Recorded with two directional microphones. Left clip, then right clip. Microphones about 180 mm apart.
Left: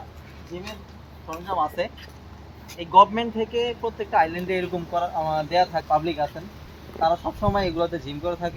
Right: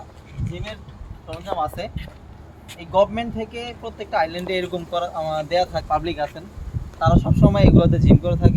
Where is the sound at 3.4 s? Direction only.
50° right (ahead or behind).